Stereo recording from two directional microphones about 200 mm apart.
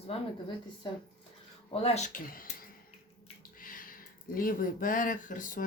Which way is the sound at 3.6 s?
45° left (ahead or behind).